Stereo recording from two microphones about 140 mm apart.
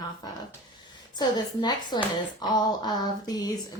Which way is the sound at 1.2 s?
30° left (ahead or behind).